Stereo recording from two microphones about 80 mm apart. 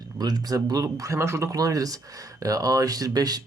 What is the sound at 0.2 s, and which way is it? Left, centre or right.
Speech, right.